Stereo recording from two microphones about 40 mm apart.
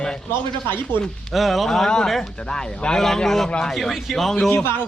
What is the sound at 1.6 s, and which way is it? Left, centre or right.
Speech, centre.